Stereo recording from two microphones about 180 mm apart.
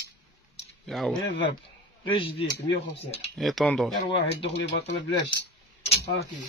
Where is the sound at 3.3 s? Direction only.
Centre (ahead or behind).